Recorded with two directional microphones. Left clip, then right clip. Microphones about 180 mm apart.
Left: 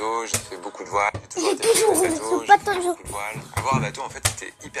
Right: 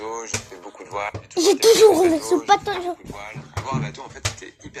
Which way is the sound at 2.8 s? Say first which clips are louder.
Left 4 dB; 30° left (ahead or behind).